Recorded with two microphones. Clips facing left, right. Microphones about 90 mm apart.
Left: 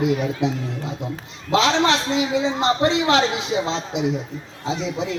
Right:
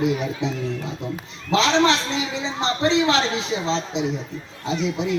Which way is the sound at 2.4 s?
50° left (ahead or behind).